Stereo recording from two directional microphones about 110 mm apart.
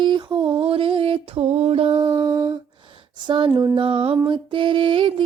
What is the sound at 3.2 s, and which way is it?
Female singing, 45° right (ahead or behind).